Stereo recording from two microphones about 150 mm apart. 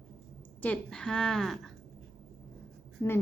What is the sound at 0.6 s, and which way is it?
A woman's voice, 5° left (ahead or behind).